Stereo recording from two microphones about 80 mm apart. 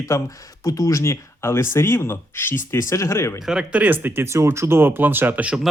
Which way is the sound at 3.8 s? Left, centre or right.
Right.